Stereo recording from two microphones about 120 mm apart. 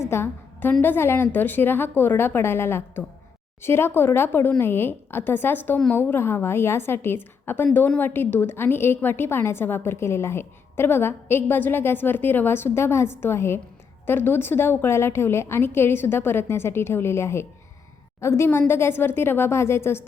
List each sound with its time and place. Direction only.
0.0 s a woman's voice: 20° left (ahead or behind)